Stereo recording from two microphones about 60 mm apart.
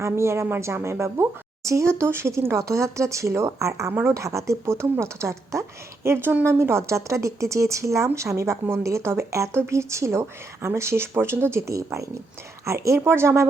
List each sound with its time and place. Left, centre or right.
0.0 s speech: right
1.6 s speech: right